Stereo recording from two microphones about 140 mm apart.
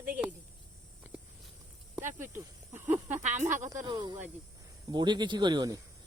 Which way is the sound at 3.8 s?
30° right (ahead or behind).